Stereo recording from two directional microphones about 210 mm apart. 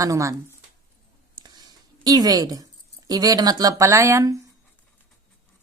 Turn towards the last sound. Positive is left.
turn(degrees=-15)  # may be behind; listen again after turning